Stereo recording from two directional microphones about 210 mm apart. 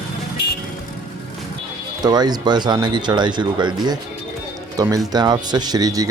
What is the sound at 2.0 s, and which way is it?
Speech, 20° right (ahead or behind).